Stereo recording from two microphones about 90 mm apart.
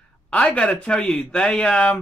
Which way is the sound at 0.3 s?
10° left (ahead or behind).